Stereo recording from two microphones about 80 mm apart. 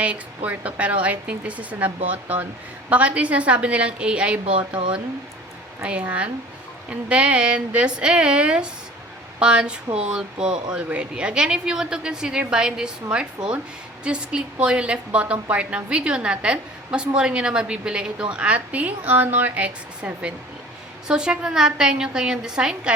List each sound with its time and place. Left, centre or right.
0.0 s speech: centre
5.8 s speech: centre